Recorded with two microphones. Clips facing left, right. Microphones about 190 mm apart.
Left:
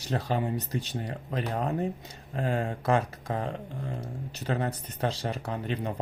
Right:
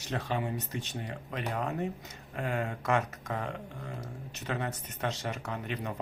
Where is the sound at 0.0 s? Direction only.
35° left (ahead or behind).